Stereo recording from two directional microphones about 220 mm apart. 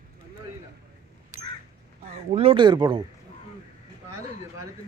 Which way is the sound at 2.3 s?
25° right (ahead or behind).